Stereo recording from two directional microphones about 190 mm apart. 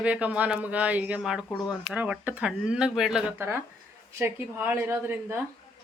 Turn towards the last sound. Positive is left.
turn(degrees=-10)  # may be behind; listen again after turning